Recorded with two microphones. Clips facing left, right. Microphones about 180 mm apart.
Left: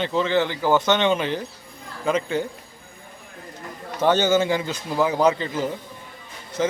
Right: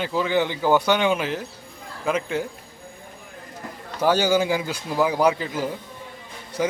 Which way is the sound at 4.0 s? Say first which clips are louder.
Left 1 dB; 10° right (ahead or behind).